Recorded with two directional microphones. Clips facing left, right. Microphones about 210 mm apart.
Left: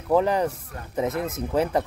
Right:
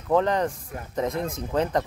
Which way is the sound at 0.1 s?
10° left (ahead or behind).